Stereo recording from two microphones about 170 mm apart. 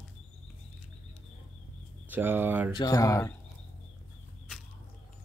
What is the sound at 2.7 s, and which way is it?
Speech, 20° left (ahead or behind).